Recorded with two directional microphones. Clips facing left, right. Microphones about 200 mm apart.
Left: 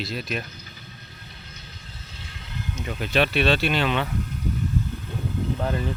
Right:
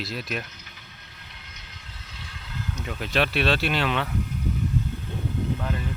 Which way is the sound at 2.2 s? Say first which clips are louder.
Even; 25° left (ahead or behind).